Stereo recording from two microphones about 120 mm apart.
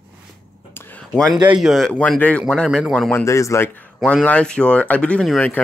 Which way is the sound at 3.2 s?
25° left (ahead or behind).